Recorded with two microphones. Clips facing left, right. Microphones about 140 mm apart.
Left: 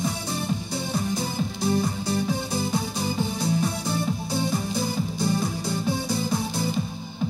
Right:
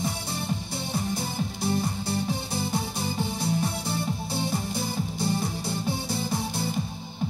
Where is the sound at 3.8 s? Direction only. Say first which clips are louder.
Left 3 dB; 45° left (ahead or behind).